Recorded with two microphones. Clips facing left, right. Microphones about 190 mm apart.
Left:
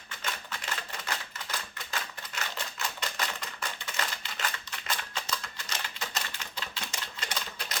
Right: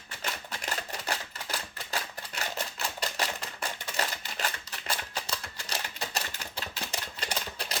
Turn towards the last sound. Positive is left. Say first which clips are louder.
# right 3 dB
turn(degrees=-35)  # may be behind; listen again after turning